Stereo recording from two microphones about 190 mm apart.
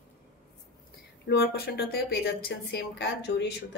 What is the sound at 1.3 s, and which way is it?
Speech, 55° left (ahead or behind).